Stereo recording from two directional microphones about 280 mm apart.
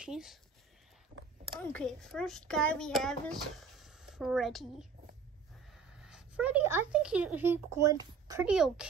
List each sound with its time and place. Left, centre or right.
0.0 s a child's voice: centre
1.6 s a child's voice: centre